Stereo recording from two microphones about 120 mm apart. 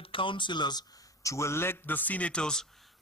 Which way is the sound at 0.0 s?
45° left (ahead or behind).